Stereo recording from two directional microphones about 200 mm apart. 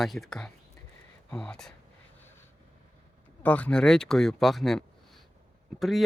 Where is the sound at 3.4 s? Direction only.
5° left (ahead or behind).